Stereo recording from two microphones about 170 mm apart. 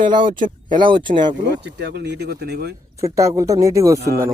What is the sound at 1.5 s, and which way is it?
Speech, 75° right (ahead or behind).